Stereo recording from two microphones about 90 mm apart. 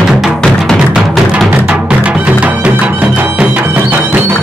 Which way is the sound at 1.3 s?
10° right (ahead or behind).